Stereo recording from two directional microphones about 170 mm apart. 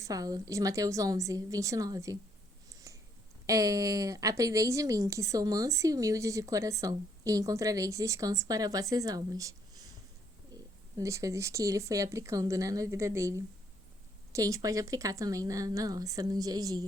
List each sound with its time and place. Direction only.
0.0 s speech: 20° right (ahead or behind)
3.4 s speech: 20° right (ahead or behind)
10.9 s speech: 20° right (ahead or behind)